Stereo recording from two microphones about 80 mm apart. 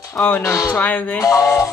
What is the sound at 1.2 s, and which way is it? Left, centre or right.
Speech, left.